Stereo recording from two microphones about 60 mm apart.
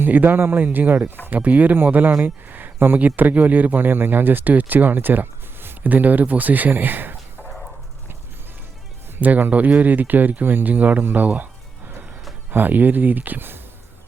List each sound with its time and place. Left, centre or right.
0.0 s speech: right
9.1 s speech: right
12.5 s speech: right